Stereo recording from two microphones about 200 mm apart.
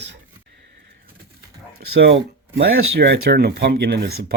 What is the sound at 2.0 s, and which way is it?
Speech, 60° right (ahead or behind).